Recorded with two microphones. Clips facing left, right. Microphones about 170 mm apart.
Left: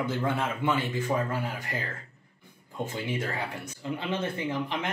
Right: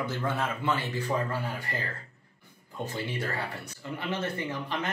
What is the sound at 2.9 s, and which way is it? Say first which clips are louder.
Speech: left 1 dB; 15° left (ahead or behind).